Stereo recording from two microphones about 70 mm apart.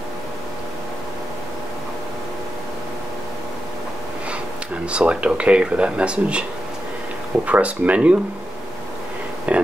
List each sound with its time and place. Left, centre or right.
4.8 s speech: centre
7.4 s speech: right
9.5 s a sound: centre